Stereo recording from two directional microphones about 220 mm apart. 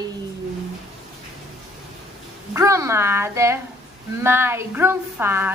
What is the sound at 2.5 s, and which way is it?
A woman's voice, 15° right (ahead or behind).